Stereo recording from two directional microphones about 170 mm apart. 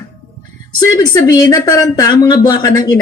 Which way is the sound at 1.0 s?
20° left (ahead or behind).